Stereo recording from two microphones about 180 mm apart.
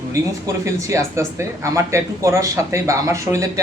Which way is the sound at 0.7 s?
15° right (ahead or behind).